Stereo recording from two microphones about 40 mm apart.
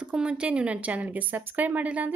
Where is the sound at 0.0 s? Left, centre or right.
Right.